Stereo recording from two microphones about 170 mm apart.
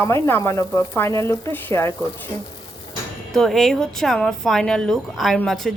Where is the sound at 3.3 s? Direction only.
Centre (ahead or behind).